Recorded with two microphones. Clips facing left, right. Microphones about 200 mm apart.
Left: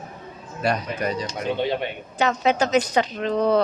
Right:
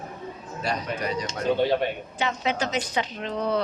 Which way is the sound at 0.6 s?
60° left (ahead or behind).